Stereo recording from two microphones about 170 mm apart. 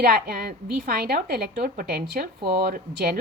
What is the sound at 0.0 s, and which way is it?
Speech, 55° right (ahead or behind).